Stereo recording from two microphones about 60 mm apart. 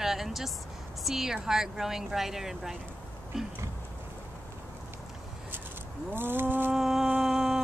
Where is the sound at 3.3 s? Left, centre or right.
Centre.